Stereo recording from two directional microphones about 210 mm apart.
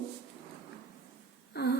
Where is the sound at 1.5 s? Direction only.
50° left (ahead or behind).